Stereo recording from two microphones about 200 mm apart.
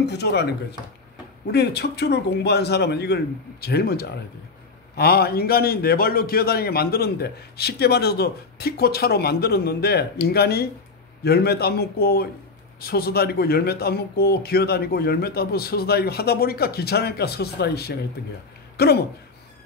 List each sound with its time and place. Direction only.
0.0 s a man's voice: 55° left (ahead or behind)